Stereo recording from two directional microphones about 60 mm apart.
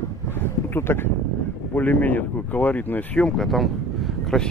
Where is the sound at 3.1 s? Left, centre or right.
Centre.